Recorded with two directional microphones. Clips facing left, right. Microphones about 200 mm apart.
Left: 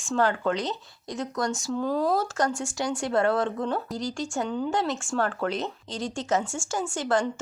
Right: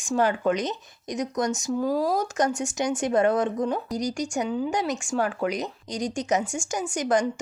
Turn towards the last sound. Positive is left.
turn(degrees=-15)  # may be behind; listen again after turning